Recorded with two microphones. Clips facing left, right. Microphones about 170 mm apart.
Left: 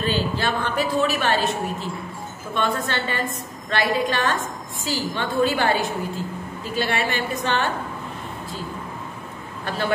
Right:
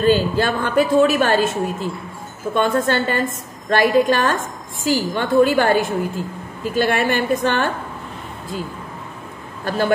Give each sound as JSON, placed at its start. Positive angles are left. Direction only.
{"t": 0.0, "sound": "a woman's voice", "side_deg": -50}
{"t": 9.7, "sound": "a woman's voice", "side_deg": -45}